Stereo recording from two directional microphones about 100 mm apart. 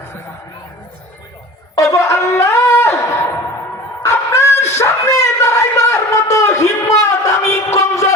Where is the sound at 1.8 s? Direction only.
30° left (ahead or behind).